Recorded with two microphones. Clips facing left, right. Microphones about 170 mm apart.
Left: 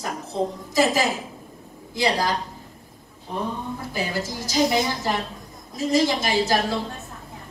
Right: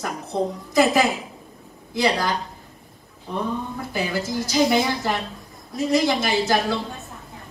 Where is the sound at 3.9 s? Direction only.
Centre (ahead or behind).